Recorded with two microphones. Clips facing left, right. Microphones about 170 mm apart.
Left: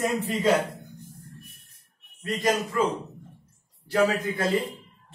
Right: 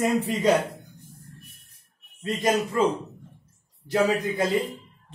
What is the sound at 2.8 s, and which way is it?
A man's voice, 25° right (ahead or behind).